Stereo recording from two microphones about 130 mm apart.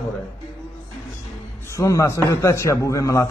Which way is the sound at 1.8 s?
25° left (ahead or behind).